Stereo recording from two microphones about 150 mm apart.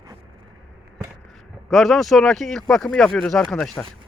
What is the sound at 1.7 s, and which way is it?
Speech, centre (ahead or behind).